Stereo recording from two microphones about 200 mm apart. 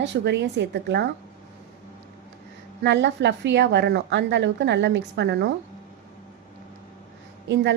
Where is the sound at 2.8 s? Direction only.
60° right (ahead or behind).